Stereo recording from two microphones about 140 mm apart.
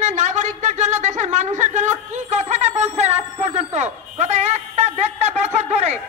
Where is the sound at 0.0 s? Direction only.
60° right (ahead or behind).